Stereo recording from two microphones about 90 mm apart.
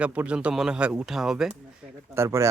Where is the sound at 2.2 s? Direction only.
35° right (ahead or behind).